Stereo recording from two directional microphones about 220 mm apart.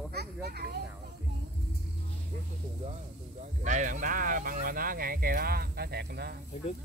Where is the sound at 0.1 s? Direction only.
45° right (ahead or behind).